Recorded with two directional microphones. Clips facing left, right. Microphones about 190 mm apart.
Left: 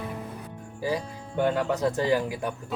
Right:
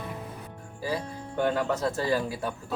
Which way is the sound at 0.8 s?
15° left (ahead or behind).